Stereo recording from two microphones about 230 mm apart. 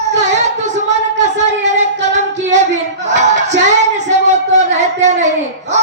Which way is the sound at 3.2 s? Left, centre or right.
Right.